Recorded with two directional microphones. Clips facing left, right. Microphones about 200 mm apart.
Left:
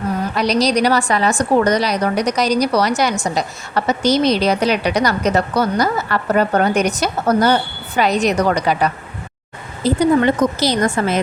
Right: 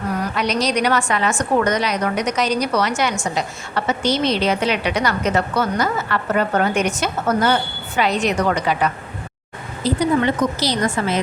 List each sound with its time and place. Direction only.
0.3 s a woman's voice: 35° left (ahead or behind)
9.8 s a woman's voice: 50° left (ahead or behind)